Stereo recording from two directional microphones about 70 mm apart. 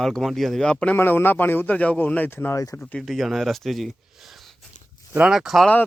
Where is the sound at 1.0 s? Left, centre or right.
Left.